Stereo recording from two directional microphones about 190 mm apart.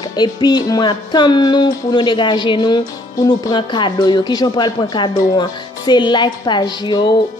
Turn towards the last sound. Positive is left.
turn(degrees=20)  # may be behind; listen again after turning